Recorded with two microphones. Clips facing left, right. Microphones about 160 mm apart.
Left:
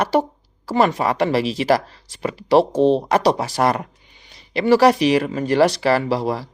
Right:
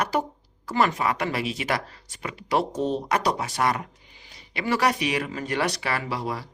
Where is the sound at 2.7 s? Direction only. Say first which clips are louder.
Left 9 dB; 90° left.